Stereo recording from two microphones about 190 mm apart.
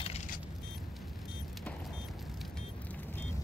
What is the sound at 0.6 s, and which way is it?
Vehicle, centre (ahead or behind).